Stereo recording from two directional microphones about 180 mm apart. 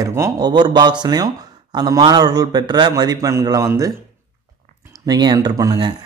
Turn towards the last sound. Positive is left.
turn(degrees=-20)  # may be behind; listen again after turning